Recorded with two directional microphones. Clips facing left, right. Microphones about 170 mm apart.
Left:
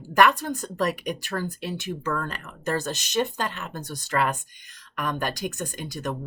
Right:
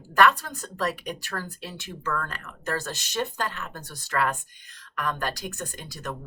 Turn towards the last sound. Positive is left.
turn(degrees=15)  # may be behind; listen again after turning